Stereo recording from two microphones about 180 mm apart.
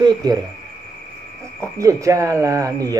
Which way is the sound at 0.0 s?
20° right (ahead or behind).